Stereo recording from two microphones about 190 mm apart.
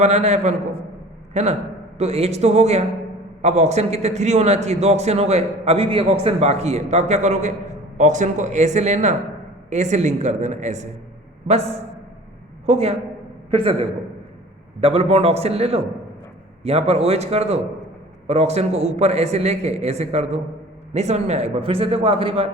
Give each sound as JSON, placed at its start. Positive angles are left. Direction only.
{"t": 0.0, "sound": "a man's voice", "side_deg": -35}
{"t": 12.6, "sound": "a man's voice", "side_deg": -30}